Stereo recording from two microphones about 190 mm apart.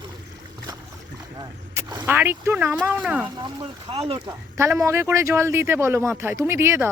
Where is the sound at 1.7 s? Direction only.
20° right (ahead or behind).